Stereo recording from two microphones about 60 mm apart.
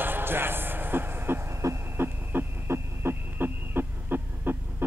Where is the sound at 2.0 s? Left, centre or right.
Right.